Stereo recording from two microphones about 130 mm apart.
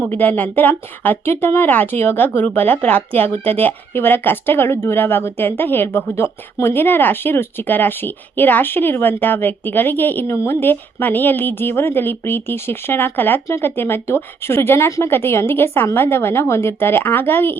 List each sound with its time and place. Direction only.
0.0 s speech: 15° left (ahead or behind)